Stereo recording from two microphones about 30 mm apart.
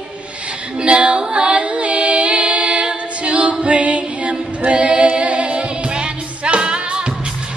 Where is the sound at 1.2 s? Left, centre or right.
Right.